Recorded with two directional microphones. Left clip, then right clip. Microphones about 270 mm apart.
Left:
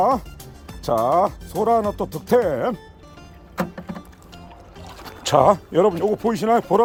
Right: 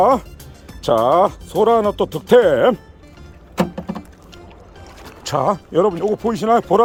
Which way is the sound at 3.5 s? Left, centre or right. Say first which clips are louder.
Right 6 dB; right.